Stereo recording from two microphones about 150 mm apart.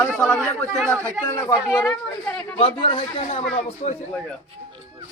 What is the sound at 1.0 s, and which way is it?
Speech, 20° left (ahead or behind).